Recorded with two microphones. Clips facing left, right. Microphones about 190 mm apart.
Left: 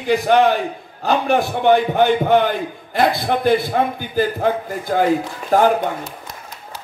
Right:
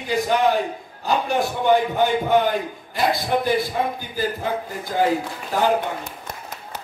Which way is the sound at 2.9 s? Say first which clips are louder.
Left 3 dB; 60° left (ahead or behind).